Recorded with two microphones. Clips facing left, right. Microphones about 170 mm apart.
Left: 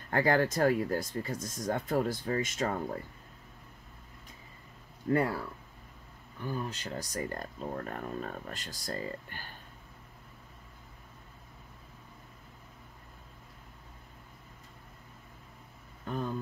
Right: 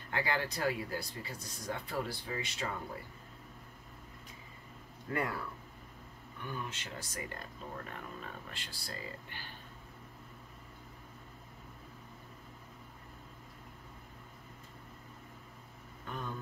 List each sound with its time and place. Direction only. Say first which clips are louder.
0.1 s speech: left 8 dB; 45° left (ahead or behind)
5.1 s speech: left 7 dB; 30° left (ahead or behind)
6.4 s speech: left 6 dB; 35° left (ahead or behind)